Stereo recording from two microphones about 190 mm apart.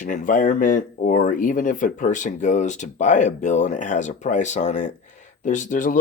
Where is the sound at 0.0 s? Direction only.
45° left (ahead or behind).